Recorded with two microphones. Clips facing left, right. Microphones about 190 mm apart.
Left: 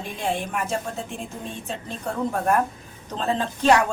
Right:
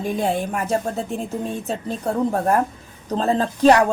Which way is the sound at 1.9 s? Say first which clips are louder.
Right 5 dB; 35° right (ahead or behind).